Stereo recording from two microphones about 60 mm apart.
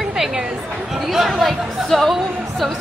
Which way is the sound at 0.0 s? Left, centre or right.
Centre.